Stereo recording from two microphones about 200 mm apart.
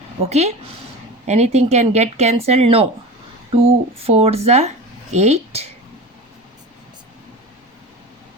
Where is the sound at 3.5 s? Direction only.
30° right (ahead or behind).